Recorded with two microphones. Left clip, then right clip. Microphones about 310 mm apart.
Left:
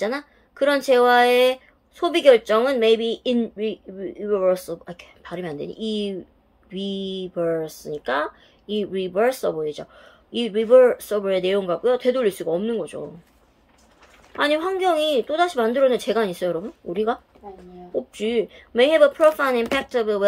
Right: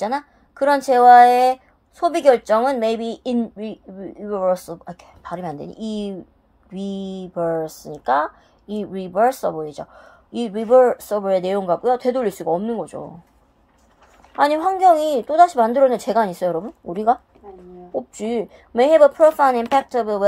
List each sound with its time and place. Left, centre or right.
0.8 s speech: centre
14.3 s speech: centre
18.1 s speech: centre